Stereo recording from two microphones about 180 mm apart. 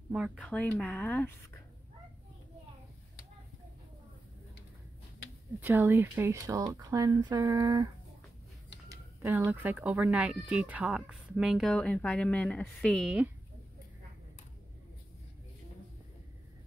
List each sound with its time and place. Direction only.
0.1 s speech: centre (ahead or behind)
5.6 s speech: 15° right (ahead or behind)
9.2 s speech: 15° right (ahead or behind)